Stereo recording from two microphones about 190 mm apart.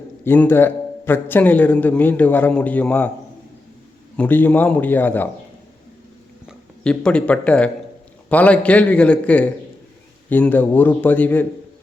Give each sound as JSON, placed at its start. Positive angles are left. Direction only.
{"t": 0.3, "sound": "a man's voice", "side_deg": 10}
{"t": 4.2, "sound": "a man's voice", "side_deg": 10}
{"t": 6.8, "sound": "a man's voice", "side_deg": 5}